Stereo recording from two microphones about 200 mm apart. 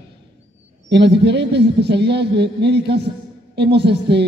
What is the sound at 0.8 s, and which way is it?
A woman's voice, 60° right (ahead or behind).